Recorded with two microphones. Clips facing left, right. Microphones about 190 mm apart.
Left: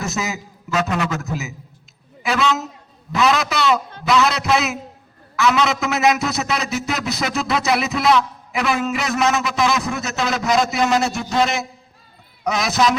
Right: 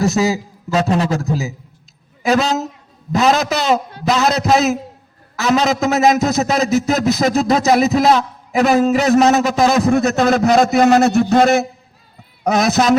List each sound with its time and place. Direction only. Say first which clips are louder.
0.0 s speech: right 10 dB; 35° right (ahead or behind)
9.9 s a man's voice: right 10 dB; 55° right (ahead or behind)